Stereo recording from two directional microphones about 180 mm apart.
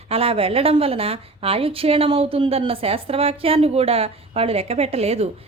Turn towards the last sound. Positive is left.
turn(degrees=-35)  # may be behind; listen again after turning